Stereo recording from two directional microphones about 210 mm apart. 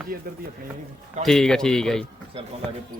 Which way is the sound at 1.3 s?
Centre (ahead or behind).